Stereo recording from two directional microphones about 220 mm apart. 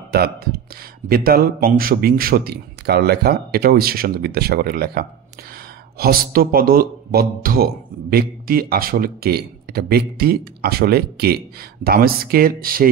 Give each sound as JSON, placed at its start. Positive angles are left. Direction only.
{"t": 0.1, "sound": "speech", "side_deg": -45}